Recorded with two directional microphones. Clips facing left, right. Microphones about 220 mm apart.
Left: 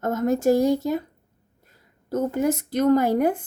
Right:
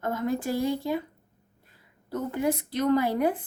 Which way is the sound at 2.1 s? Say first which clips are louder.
Left 5 dB; 45° left (ahead or behind).